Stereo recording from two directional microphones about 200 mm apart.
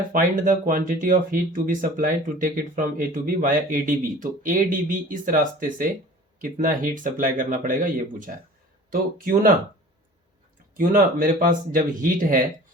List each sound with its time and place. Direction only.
0.1 s speech: 45° right (ahead or behind)
10.8 s speech: 45° right (ahead or behind)